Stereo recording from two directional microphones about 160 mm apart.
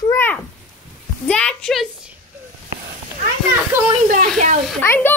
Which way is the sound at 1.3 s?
5° left (ahead or behind).